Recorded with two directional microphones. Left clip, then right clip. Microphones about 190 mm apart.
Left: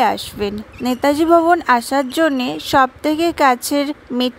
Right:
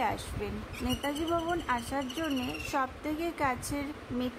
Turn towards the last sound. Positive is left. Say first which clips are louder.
# left 17 dB
turn(degrees=45)  # may be behind; listen again after turning